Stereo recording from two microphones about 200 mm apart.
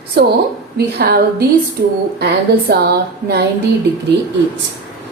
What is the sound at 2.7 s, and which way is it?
Speech, 55° right (ahead or behind).